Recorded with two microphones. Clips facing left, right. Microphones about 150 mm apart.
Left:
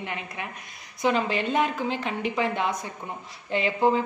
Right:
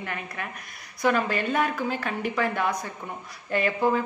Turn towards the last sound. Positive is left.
turn(degrees=20)  # may be behind; listen again after turning